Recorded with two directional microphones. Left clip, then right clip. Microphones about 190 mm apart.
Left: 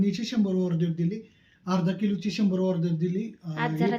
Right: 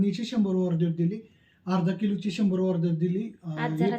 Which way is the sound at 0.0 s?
5° right (ahead or behind).